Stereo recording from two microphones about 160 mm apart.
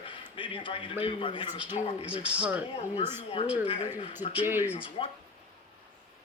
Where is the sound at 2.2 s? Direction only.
10° right (ahead or behind).